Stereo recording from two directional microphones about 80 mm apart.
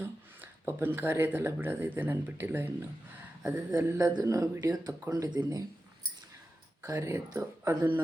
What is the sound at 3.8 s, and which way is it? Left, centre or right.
Speech, right.